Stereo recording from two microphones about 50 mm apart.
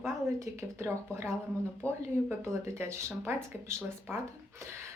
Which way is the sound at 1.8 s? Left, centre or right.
Left.